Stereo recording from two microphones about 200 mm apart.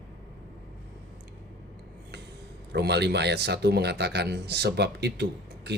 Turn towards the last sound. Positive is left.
turn(degrees=-55)  # may be behind; listen again after turning